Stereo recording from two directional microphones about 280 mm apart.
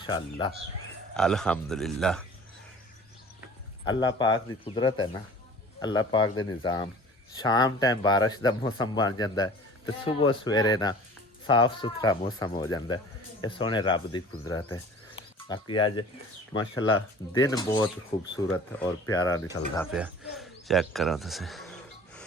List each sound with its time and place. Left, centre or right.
0.0 s speech: centre
1.1 s speech: centre
3.8 s speech: centre
17.3 s speech: centre
19.9 s speech: centre